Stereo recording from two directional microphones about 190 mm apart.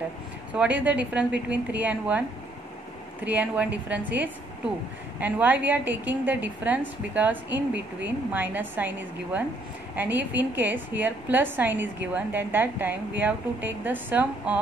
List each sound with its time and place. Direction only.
0.5 s a woman's voice: 5° right (ahead or behind)
3.3 s a woman's voice: 10° right (ahead or behind)